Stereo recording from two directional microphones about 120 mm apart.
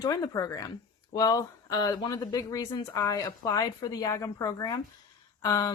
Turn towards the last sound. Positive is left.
turn(degrees=30)  # may be behind; listen again after turning